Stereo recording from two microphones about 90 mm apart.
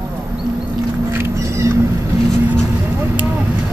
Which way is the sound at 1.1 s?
30° right (ahead or behind).